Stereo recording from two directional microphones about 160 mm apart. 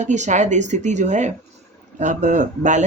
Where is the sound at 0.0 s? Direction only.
50° right (ahead or behind).